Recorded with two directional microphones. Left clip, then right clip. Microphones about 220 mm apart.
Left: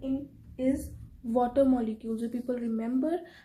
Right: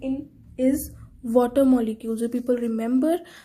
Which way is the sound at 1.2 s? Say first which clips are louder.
Right 6 dB; 35° right (ahead or behind).